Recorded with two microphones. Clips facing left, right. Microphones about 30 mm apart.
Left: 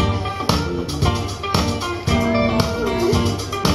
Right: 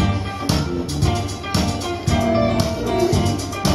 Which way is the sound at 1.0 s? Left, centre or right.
Centre.